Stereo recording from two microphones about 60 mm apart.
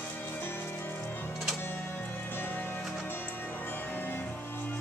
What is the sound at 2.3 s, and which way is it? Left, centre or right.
Music, left.